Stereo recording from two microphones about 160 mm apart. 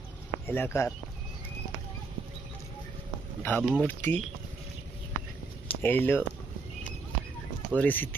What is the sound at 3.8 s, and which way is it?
Speech, 10° left (ahead or behind).